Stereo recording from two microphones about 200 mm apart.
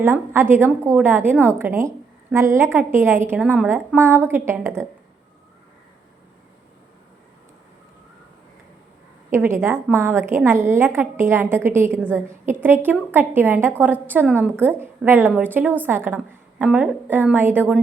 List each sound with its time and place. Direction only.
0.0 s a woman's voice: 10° right (ahead or behind)
9.3 s a woman's voice: 10° right (ahead or behind)